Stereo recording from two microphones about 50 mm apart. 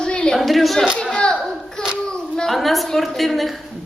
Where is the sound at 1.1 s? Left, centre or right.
Centre.